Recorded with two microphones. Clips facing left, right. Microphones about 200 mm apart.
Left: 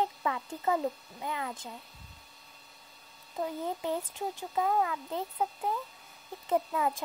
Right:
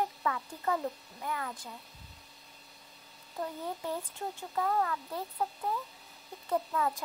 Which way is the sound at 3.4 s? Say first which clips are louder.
Left 4 dB; 15° left (ahead or behind).